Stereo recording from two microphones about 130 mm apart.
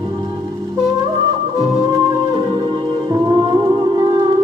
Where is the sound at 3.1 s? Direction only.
30° right (ahead or behind).